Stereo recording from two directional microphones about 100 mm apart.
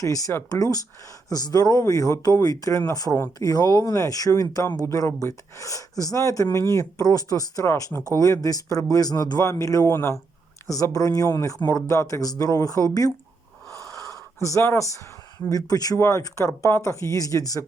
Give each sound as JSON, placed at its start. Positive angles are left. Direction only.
{"t": 0.0, "sound": "speech", "side_deg": 35}
{"t": 13.7, "sound": "wheeze", "side_deg": -35}
{"t": 14.4, "sound": "speech", "side_deg": 25}
{"t": 15.4, "sound": "speech", "side_deg": 40}
{"t": 16.0, "sound": "speech", "side_deg": 25}